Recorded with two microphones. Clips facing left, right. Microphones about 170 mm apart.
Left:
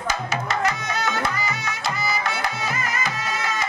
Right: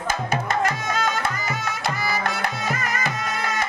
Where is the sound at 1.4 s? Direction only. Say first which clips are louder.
Right 1 dB; 55° right (ahead or behind).